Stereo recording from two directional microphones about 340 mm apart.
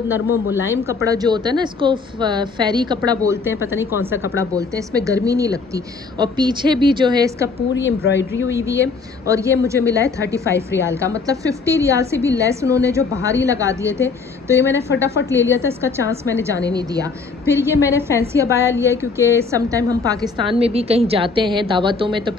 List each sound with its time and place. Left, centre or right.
0.1 s a woman's voice: centre
7.5 s a woman's voice: left
8.3 s a woman's voice: centre